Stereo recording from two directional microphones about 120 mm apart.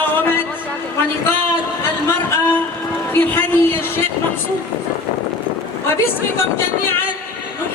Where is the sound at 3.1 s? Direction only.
15° left (ahead or behind).